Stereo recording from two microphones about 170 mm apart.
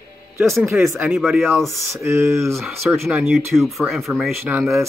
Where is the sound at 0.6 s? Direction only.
15° right (ahead or behind).